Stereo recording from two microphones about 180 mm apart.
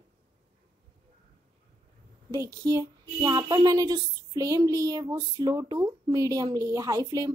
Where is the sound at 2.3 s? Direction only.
20° right (ahead or behind).